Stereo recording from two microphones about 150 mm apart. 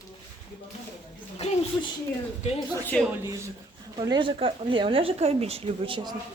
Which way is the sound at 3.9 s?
30° right (ahead or behind).